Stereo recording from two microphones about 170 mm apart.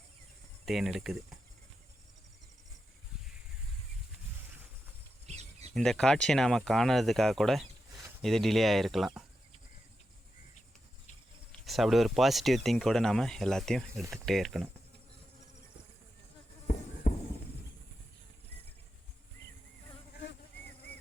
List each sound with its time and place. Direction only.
0.6 s speech: centre (ahead or behind)
5.2 s bird: 40° right (ahead or behind)
5.7 s speech: 5° left (ahead or behind)
11.6 s speech: centre (ahead or behind)
16.6 s a sound: 40° left (ahead or behind)